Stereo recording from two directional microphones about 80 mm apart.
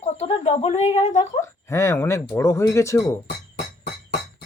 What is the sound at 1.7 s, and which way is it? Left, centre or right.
Speech, left.